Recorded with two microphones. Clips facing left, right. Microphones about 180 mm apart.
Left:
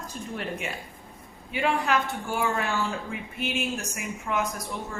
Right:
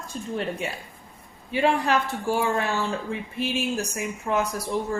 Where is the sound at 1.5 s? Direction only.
35° right (ahead or behind).